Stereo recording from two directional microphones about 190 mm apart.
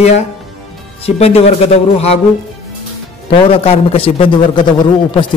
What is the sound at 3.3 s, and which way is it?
A man's voice, 30° left (ahead or behind).